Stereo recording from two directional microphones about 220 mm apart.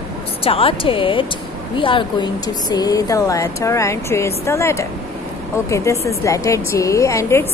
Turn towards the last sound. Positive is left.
turn(degrees=10)  # may be behind; listen again after turning